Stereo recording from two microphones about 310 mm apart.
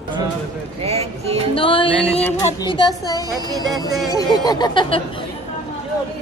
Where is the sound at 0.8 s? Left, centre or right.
Centre.